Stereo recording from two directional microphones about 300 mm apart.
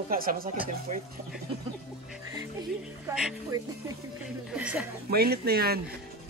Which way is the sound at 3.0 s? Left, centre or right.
Centre.